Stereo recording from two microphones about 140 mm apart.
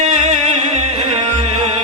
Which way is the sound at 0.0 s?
50° right (ahead or behind).